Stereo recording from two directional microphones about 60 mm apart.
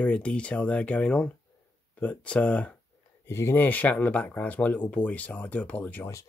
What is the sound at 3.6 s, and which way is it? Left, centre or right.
Speech, left.